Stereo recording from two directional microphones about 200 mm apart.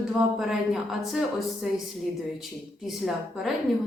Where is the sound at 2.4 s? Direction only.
Centre (ahead or behind).